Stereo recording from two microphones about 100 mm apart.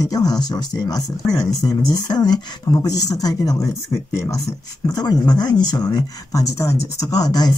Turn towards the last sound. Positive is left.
turn(degrees=45)  # may be behind; listen again after turning